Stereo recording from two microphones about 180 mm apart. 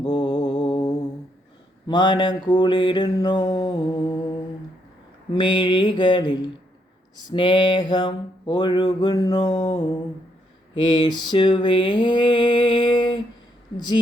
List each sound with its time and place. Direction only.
0.0 s mantra: 20° left (ahead or behind)